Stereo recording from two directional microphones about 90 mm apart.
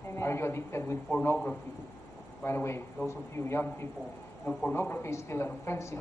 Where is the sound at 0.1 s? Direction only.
30° left (ahead or behind).